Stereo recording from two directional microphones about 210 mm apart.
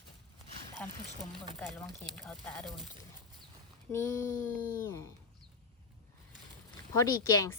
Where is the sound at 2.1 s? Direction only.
Centre (ahead or behind).